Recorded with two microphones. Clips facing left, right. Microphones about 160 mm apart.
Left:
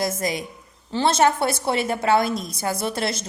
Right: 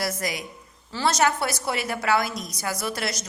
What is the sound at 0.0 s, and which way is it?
A woman's voice, 25° left (ahead or behind).